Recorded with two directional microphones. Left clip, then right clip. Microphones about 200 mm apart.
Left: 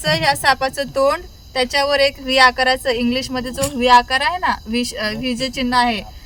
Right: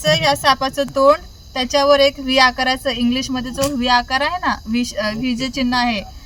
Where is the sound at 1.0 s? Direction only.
35° left (ahead or behind).